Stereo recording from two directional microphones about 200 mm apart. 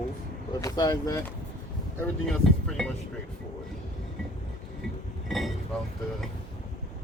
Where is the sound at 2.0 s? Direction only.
5° left (ahead or behind).